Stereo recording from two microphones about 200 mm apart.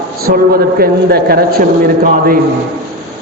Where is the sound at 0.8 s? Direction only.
50° right (ahead or behind).